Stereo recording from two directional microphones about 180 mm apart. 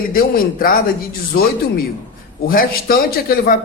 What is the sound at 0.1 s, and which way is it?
Speech, 55° left (ahead or behind).